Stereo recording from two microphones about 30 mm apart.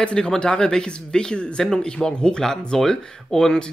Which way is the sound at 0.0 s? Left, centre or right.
Left.